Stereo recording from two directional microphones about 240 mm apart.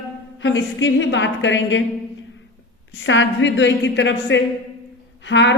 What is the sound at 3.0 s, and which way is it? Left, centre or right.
A woman's voice, left.